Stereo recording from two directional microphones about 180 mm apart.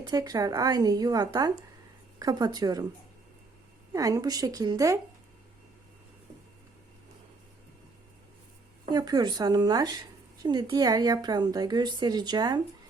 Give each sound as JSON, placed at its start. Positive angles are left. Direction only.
{"t": 0.1, "sound": "a woman's voice", "side_deg": -20}
{"t": 3.9, "sound": "a woman's voice", "side_deg": -20}
{"t": 8.9, "sound": "a woman's voice", "side_deg": -20}